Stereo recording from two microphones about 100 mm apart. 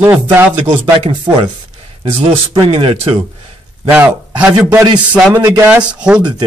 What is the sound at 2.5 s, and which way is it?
Speech, 55° right (ahead or behind).